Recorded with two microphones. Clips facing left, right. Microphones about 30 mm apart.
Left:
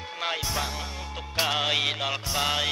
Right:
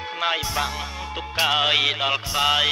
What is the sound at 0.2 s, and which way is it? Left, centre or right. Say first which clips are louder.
Music: right 5 dB; right.